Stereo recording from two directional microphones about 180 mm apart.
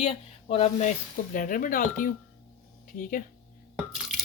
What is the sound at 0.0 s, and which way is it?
Speech, 35° left (ahead or behind).